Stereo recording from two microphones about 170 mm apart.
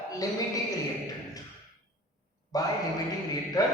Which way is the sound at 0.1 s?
20° left (ahead or behind).